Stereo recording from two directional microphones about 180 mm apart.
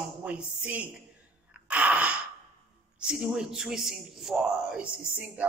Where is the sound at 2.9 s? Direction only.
5° right (ahead or behind).